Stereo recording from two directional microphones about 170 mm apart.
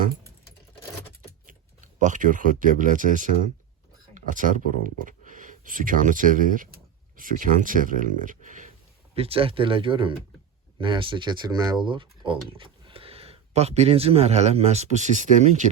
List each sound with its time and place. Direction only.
1.5 s speech: 50° right (ahead or behind)
9.1 s speech: 35° right (ahead or behind)